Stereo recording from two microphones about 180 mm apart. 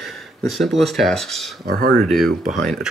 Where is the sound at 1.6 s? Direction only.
55° right (ahead or behind).